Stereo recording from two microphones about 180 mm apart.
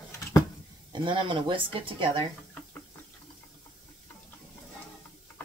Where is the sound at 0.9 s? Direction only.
25° right (ahead or behind).